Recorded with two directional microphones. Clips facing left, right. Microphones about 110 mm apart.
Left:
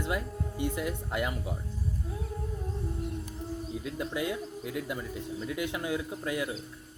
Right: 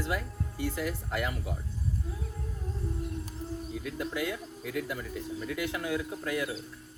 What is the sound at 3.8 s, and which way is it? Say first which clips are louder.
Speech: left 1 dB; 25° left (ahead or behind).